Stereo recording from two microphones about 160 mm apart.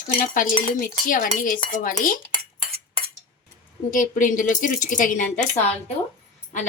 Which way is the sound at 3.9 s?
55° left (ahead or behind).